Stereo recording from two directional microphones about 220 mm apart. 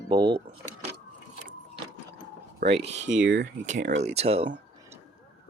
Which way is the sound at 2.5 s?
50° right (ahead or behind).